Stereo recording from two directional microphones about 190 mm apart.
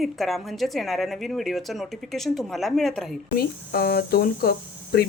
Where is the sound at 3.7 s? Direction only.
55° left (ahead or behind).